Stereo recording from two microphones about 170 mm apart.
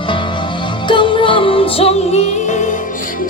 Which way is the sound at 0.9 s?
30° left (ahead or behind).